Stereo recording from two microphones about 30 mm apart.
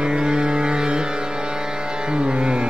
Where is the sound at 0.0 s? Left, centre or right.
Right.